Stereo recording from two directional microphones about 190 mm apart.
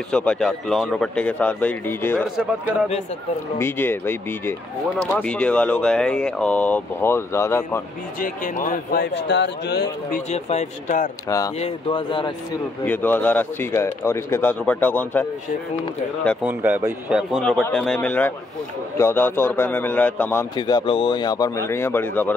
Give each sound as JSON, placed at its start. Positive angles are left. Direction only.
{"t": 0.1, "sound": "speech", "side_deg": 5}
{"t": 2.2, "sound": "speech", "side_deg": -5}
{"t": 3.5, "sound": "speech", "side_deg": 10}
{"t": 8.2, "sound": "a man's voice", "side_deg": 45}
{"t": 9.0, "sound": "a man's voice", "side_deg": 70}
{"t": 10.3, "sound": "speech", "side_deg": 35}
{"t": 11.2, "sound": "speech", "side_deg": 15}
{"t": 12.8, "sound": "speech", "side_deg": 10}
{"t": 16.4, "sound": "speech", "side_deg": -10}
{"t": 17.4, "sound": "speech", "side_deg": 5}
{"t": 20.5, "sound": "speech", "side_deg": 25}